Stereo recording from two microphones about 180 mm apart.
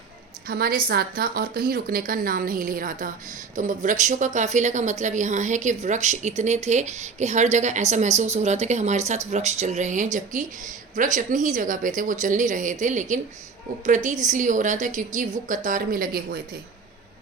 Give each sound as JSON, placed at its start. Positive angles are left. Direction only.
{"t": 0.4, "sound": "a woman's voice", "side_deg": -55}